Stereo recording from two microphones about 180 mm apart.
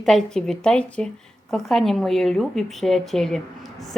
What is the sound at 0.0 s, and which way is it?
Speech, 5° left (ahead or behind).